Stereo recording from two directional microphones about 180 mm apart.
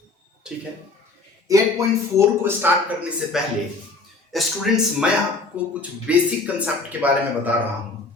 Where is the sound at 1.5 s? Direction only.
20° right (ahead or behind).